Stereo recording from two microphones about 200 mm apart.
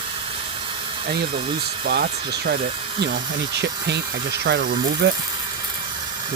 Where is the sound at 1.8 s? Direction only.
50° right (ahead or behind).